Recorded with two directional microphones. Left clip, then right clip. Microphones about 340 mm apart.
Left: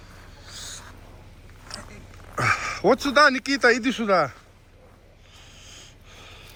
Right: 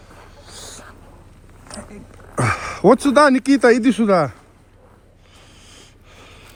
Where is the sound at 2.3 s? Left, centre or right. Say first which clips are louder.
Right 2 dB; centre.